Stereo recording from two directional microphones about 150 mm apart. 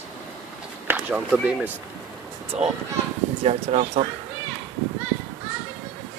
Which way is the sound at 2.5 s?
45° right (ahead or behind).